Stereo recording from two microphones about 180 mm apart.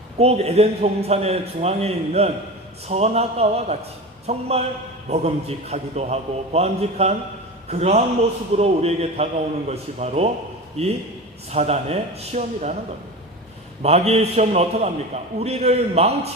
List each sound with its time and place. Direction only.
0.2 s a man's voice: 35° right (ahead or behind)
13.8 s a man's voice: 35° right (ahead or behind)